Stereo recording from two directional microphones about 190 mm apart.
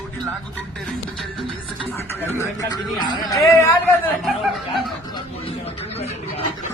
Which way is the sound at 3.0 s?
20° left (ahead or behind).